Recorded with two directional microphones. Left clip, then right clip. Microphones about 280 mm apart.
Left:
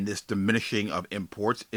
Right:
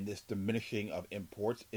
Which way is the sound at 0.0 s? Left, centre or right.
Centre.